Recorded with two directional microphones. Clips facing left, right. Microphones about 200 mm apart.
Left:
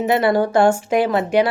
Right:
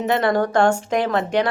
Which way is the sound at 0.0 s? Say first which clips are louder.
Left 2 dB; 10° left (ahead or behind).